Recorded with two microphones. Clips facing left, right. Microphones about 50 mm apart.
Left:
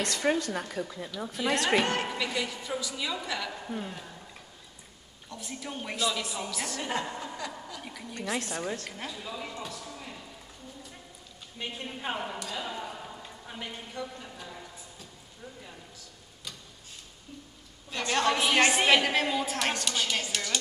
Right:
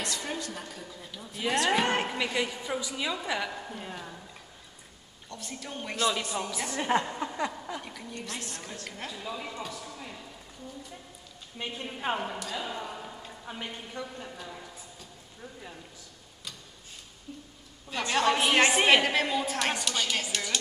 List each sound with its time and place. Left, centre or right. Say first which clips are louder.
0.0 s speech: left 7 dB; left
1.9 s a woman's voice: right 2 dB; centre
3.4 s a woman's voice: left 2 dB; centre
5.3 s a woman's voice: left 1 dB; centre
6.5 s a woman's voice: right 6 dB; centre
7.8 s a woman's voice: left 2 dB; centre
11.5 s a woman's voice: right 1 dB; centre
13.9 s a sound: even; centre
17.8 s a woman's voice: right 1 dB; centre